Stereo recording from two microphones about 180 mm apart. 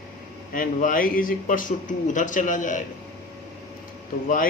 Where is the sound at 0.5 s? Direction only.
50° left (ahead or behind).